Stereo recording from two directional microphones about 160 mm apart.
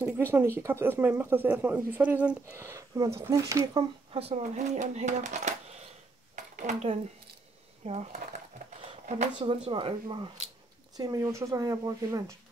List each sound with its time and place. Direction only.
0.0 s speech: 15° right (ahead or behind)
4.1 s speech: 40° right (ahead or behind)
6.3 s a sound: 50° right (ahead or behind)
7.8 s speech: 40° right (ahead or behind)
9.4 s speech: 30° right (ahead or behind)